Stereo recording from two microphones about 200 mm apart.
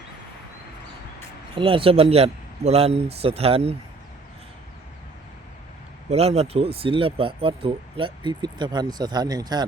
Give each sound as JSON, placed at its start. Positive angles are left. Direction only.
{"t": 1.5, "sound": "speech", "side_deg": -25}
{"t": 6.1, "sound": "speech", "side_deg": -30}